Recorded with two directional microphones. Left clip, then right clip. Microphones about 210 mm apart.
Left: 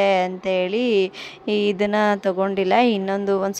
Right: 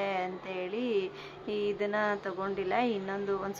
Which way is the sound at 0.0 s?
40° left (ahead or behind).